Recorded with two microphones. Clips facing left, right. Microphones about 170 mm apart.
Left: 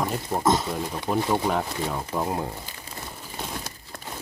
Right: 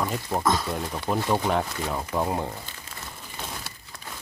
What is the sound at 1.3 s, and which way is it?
Speech, 5° left (ahead or behind).